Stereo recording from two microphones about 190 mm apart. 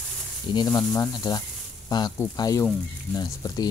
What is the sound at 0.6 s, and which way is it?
Speech, 20° left (ahead or behind).